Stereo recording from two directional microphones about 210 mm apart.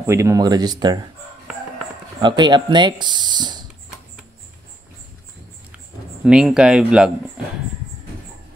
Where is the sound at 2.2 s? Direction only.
20° right (ahead or behind).